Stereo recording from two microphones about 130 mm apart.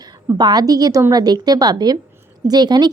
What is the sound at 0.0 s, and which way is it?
Speech, 30° right (ahead or behind).